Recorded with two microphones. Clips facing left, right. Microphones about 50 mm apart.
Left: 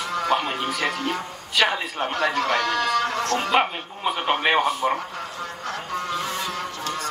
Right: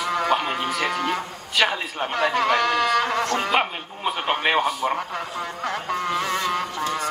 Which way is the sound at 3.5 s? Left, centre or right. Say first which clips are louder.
Left 1 dB; centre.